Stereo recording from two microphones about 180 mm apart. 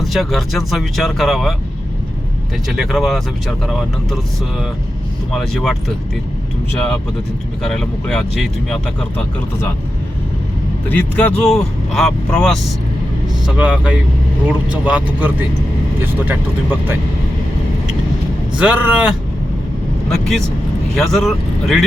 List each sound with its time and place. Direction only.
0.0 s speech: centre (ahead or behind)
2.6 s speech: centre (ahead or behind)
5.3 s speech: centre (ahead or behind)
7.6 s speech: 5° left (ahead or behind)
10.8 s speech: 10° left (ahead or behind); by 16.4 s 10° right (ahead or behind)
18.6 s speech: 5° right (ahead or behind)